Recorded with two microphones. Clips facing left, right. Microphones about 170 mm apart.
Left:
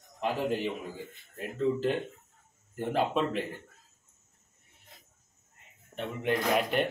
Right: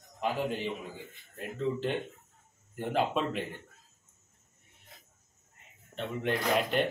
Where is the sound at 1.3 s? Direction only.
Centre (ahead or behind).